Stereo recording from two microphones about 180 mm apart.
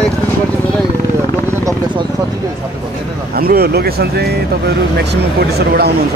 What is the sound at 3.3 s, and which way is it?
Speech, 60° right (ahead or behind).